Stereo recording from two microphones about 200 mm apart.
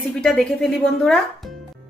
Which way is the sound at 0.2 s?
Centre (ahead or behind).